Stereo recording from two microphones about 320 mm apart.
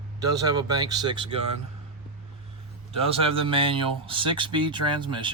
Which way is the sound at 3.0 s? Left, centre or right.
Centre.